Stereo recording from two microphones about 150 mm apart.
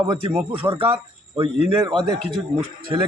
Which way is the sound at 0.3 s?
10° right (ahead or behind).